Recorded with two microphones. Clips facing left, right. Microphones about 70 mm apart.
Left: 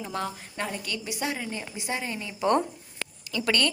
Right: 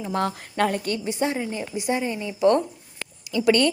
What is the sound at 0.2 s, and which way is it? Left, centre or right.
Speech, right.